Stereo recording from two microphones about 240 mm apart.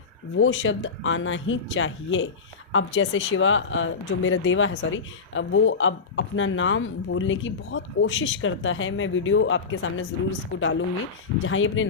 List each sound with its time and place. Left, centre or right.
0.3 s speech: left